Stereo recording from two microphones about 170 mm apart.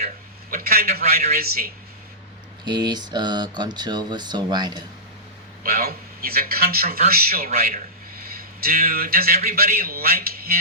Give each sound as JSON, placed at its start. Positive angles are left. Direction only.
{"t": 0.5, "sound": "a sound", "side_deg": -60}
{"t": 0.9, "sound": "a man's voice", "side_deg": -65}
{"t": 2.6, "sound": "speech", "side_deg": -25}
{"t": 5.6, "sound": "a man's voice", "side_deg": -60}